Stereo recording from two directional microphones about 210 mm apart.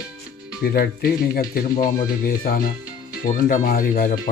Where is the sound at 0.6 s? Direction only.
45° left (ahead or behind).